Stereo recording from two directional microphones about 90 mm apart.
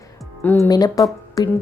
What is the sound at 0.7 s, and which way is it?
Speech, 45° left (ahead or behind).